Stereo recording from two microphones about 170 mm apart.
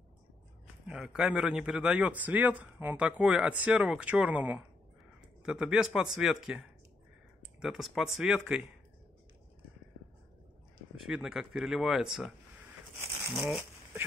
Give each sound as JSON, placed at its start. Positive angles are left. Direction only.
{"t": 0.8, "sound": "speech", "side_deg": -5}
{"t": 7.6, "sound": "speech", "side_deg": 0}
{"t": 11.0, "sound": "speech", "side_deg": 0}
{"t": 12.9, "sound": "crumpling", "side_deg": -15}
{"t": 13.4, "sound": "speech", "side_deg": 0}